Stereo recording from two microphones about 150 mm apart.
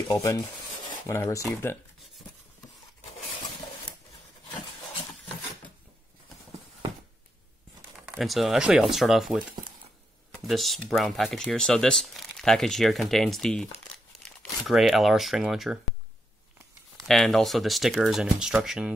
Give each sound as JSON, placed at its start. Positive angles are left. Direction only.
{"t": 0.0, "sound": "filing", "side_deg": 25}
{"t": 0.7, "sound": "a sound", "side_deg": 30}
{"t": 1.1, "sound": "speech", "side_deg": 20}
{"t": 8.0, "sound": "speech", "side_deg": -5}
{"t": 13.9, "sound": "crumpling", "side_deg": 0}
{"t": 17.1, "sound": "speech", "side_deg": 0}